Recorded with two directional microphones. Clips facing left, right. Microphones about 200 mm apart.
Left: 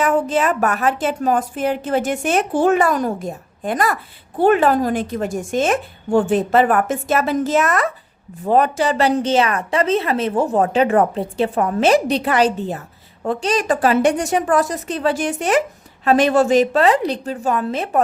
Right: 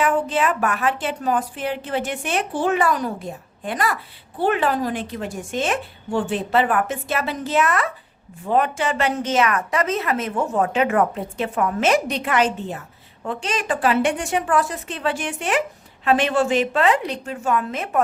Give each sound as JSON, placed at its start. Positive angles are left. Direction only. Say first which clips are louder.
{"t": 0.0, "sound": "a woman's voice", "louder": "left 3 dB", "side_deg": 40}